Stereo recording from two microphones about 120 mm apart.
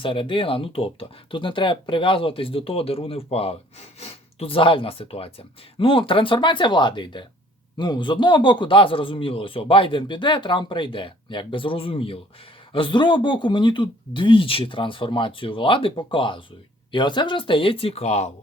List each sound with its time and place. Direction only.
0.0 s speech: 45° left (ahead or behind); by 18.3 s 65° left (ahead or behind)